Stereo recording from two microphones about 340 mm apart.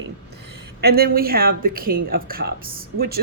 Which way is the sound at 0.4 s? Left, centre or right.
Right.